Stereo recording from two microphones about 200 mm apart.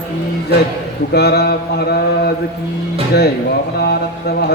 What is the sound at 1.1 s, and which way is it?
Mantra, 55° left (ahead or behind).